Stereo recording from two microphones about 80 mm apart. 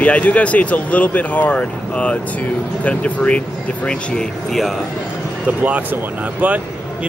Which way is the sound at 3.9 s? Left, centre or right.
Centre.